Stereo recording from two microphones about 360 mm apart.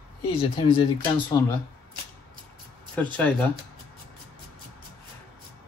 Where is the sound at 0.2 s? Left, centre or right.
Centre.